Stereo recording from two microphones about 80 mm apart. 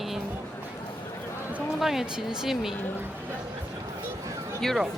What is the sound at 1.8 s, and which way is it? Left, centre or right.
Speech, centre.